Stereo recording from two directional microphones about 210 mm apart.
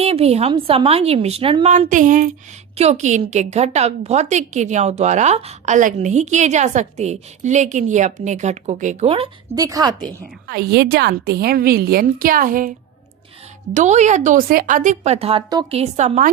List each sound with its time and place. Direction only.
0.0 s a woman's voice: 30° right (ahead or behind)
9.6 s a woman's voice: 15° right (ahead or behind)
10.4 s a woman's voice: 50° right (ahead or behind)
13.7 s a woman's voice: 35° right (ahead or behind)
15.8 s a woman's voice: 35° right (ahead or behind)